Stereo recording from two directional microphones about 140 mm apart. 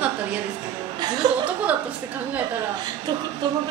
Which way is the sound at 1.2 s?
30° right (ahead or behind).